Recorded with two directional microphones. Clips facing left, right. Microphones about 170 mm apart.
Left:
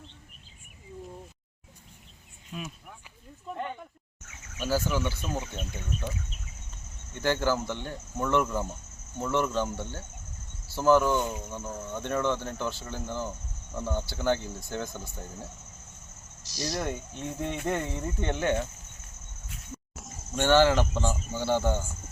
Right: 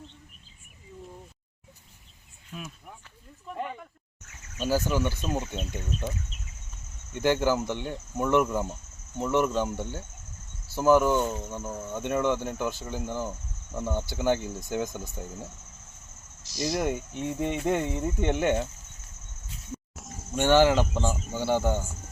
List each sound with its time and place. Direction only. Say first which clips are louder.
2.5 s speech: left 2 dB; 5° left (ahead or behind)
4.6 s speech: right 2 dB; 15° right (ahead or behind)
16.6 s speech: right 4 dB; 15° right (ahead or behind)
19.9 s a sound: right 1 dB; centre (ahead or behind)
20.3 s speech: right 1 dB; 15° right (ahead or behind)